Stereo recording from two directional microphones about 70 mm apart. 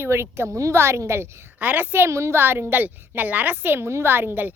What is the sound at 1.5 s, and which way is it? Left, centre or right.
Speech, right.